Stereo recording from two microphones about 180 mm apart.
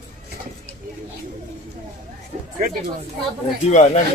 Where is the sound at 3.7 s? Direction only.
40° left (ahead or behind).